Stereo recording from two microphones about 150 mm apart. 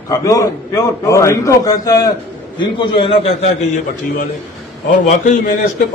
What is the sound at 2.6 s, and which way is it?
Speech, 35° left (ahead or behind).